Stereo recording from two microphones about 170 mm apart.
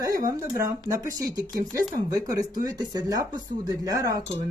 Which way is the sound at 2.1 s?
20° right (ahead or behind).